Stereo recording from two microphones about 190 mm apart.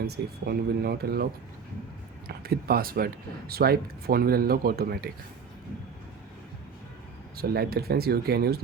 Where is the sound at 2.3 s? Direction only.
55° right (ahead or behind).